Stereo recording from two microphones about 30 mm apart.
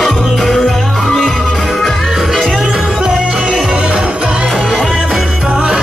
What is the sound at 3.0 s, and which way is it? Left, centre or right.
Music, right.